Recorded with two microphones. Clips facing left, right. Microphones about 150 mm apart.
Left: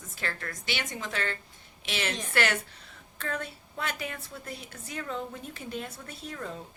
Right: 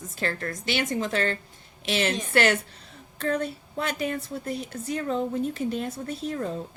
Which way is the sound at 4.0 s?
40° right (ahead or behind).